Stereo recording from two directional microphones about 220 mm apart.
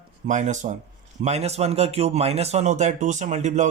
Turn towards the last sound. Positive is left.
turn(degrees=-35)  # may be behind; listen again after turning